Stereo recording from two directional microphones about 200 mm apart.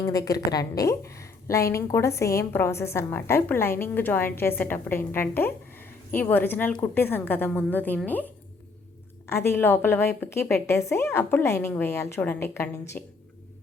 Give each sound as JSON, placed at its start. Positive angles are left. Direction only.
{"t": 0.0, "sound": "a woman's voice", "side_deg": 20}